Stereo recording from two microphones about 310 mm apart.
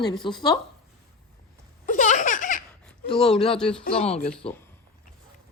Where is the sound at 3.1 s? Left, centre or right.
Centre.